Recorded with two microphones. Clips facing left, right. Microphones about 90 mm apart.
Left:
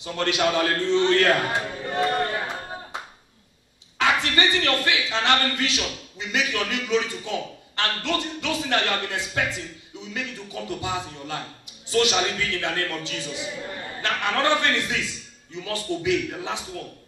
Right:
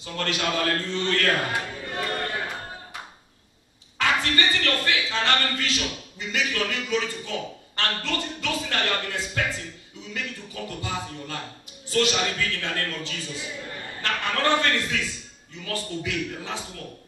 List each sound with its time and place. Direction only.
0.0 s a man's voice: 20° left (ahead or behind)
4.0 s a sound: 20° left (ahead or behind)
5.1 s a man's voice: 20° left (ahead or behind)